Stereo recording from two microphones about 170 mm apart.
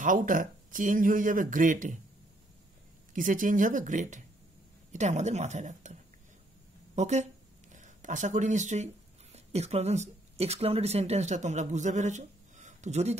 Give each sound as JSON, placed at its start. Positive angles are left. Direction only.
{"t": 0.0, "sound": "speech", "side_deg": -50}
{"t": 3.1, "sound": "speech", "side_deg": -50}
{"t": 7.0, "sound": "speech", "side_deg": -40}